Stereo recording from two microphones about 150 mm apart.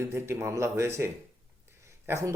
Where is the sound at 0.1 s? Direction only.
15° right (ahead or behind).